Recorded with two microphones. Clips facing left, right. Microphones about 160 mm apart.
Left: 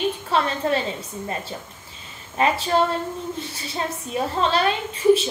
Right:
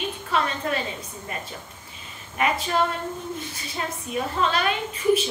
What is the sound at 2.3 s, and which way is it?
A woman's voice, 30° left (ahead or behind).